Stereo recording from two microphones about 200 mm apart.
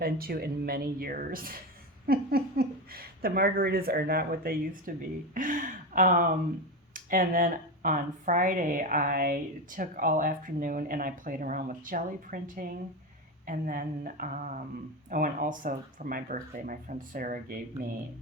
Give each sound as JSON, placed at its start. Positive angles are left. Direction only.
{"t": 0.0, "sound": "speech", "side_deg": -50}